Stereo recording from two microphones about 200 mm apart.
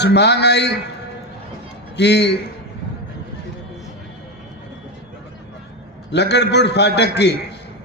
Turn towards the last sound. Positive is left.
turn(degrees=55)  # may be behind; listen again after turning